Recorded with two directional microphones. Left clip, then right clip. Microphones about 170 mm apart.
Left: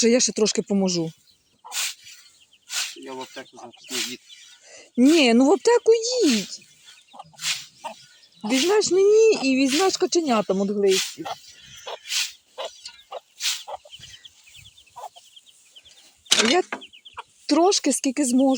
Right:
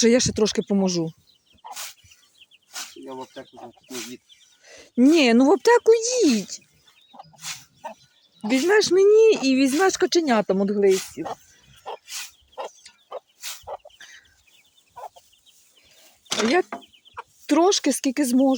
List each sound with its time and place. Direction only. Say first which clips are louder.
0.0 s speech: right 1 dB; 5° right (ahead or behind)
1.7 s dog: left 9 dB; 15° right (ahead or behind)
2.6 s a sound: left 6 dB; 10° right (ahead or behind)
3.8 s speech: left 8 dB; 5° right (ahead or behind)
7.3 s fowl: left 9 dB; centre (ahead or behind)
8.5 s speech: right 1 dB; 5° right (ahead or behind)
10.8 s speech: right 1 dB; 5° left (ahead or behind)
12.0 s dog: left 10 dB; centre (ahead or behind)
12.9 s chicken: left 1 dB; centre (ahead or behind)
14.9 s chicken: even; 45° right (ahead or behind)
16.0 s a sound: left 5 dB; 40° right (ahead or behind)
17.4 s speech: even; centre (ahead or behind)